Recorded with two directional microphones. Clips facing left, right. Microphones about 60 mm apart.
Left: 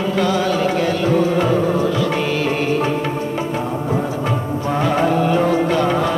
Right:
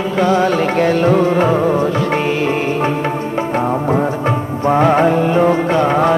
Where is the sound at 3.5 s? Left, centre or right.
Right.